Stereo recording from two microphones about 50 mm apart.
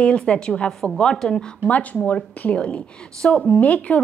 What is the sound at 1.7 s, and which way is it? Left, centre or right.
A woman's voice, left.